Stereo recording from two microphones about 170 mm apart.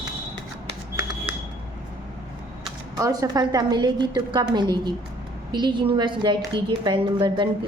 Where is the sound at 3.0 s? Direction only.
20° right (ahead or behind).